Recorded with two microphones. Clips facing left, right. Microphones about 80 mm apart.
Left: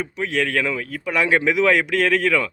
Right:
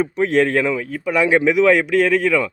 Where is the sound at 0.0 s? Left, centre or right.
Right.